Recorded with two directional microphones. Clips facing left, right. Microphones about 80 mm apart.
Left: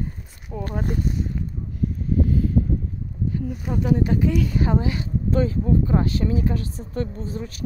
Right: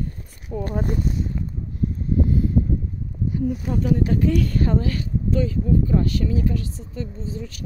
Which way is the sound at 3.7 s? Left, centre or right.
Centre.